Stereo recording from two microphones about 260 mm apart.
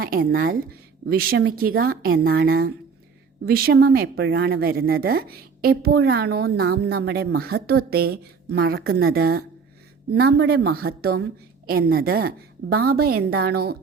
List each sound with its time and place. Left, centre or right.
0.0 s a woman's voice: right